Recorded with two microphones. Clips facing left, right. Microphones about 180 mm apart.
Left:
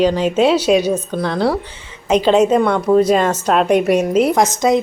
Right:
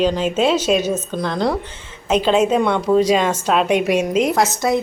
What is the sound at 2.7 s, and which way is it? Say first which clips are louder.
Speech: left 2 dB; 10° left (ahead or behind).